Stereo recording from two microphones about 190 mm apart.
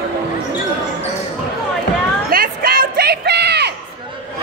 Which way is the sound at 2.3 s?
50° right (ahead or behind).